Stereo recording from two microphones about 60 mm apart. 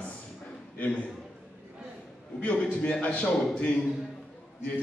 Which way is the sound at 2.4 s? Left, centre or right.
Left.